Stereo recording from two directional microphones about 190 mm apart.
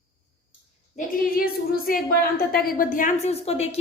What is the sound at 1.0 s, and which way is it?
A woman's voice, 50° left (ahead or behind).